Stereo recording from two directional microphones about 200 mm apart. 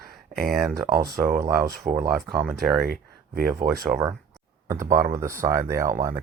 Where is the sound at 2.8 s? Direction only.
50° right (ahead or behind).